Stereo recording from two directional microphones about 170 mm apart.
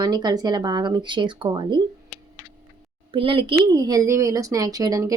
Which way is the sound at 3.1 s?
30° right (ahead or behind).